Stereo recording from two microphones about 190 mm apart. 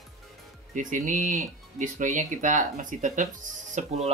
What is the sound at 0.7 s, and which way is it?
Speech, 40° right (ahead or behind).